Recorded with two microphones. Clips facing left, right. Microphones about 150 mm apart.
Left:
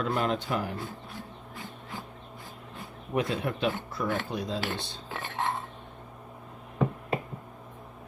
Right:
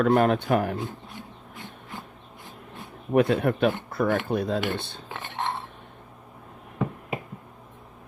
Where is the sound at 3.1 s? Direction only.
55° right (ahead or behind).